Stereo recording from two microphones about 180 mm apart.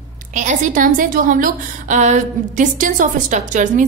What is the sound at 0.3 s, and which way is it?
A woman's voice, 45° right (ahead or behind).